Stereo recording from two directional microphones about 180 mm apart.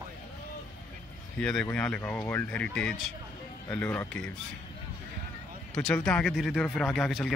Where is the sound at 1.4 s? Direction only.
5° left (ahead or behind).